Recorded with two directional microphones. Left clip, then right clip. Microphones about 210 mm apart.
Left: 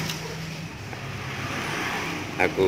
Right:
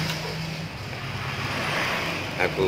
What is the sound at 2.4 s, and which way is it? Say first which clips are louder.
Speech: left 2 dB; 30° left (ahead or behind).